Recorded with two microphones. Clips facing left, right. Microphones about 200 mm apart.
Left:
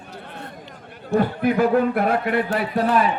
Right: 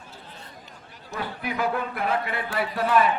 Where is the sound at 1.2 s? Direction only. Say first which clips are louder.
Left 11 dB; 50° left (ahead or behind).